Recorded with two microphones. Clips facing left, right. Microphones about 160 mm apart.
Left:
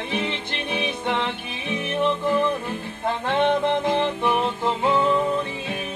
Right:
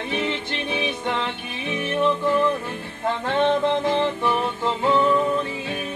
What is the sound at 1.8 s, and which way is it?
Music, 15° left (ahead or behind).